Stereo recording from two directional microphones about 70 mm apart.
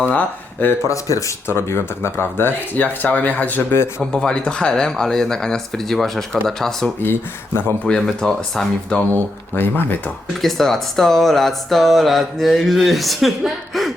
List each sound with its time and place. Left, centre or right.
0.1 s speech: left
0.9 s speech: left
1.5 s speech: left
4.0 s speech: centre
7.0 s speech: left
7.9 s speech: centre
9.6 s speech: left
10.4 s speech: centre